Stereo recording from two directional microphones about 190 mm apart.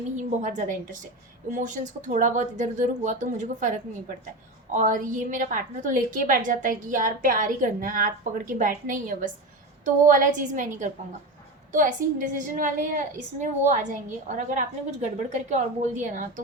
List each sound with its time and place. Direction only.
0.2 s a woman's voice: 40° right (ahead or behind)